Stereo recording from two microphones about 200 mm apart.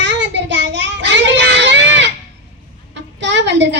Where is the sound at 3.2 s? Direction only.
60° right (ahead or behind).